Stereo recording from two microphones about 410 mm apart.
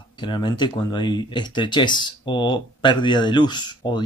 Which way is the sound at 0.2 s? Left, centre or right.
Centre.